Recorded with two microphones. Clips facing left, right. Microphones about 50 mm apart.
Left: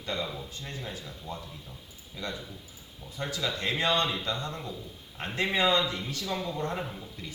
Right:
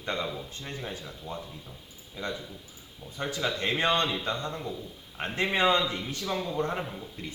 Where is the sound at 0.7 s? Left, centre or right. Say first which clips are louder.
Right 3 dB; right.